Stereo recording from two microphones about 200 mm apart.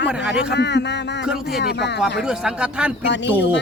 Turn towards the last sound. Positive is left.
turn(degrees=60)  # may be behind; listen again after turning